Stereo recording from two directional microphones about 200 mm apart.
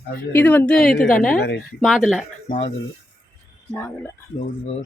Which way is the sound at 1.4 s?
55° left (ahead or behind).